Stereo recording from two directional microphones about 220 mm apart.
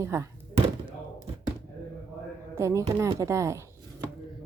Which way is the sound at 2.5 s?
15° right (ahead or behind).